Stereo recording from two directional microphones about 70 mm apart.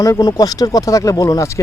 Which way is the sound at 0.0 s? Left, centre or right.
Left.